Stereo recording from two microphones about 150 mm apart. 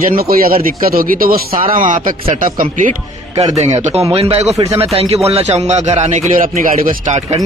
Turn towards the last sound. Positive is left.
turn(degrees=-50)  # may be behind; listen again after turning